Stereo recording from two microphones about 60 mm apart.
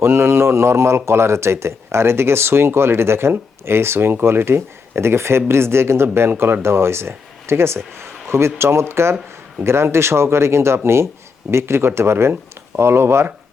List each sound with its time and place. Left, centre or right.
0.0 s a man's voice: right